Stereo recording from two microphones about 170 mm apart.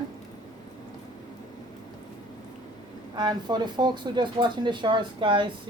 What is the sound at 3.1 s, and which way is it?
Speech, 25° right (ahead or behind).